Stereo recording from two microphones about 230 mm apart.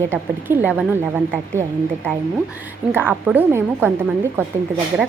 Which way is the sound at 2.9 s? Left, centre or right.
Centre.